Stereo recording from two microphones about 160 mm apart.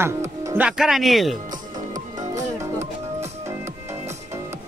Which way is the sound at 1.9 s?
20° right (ahead or behind).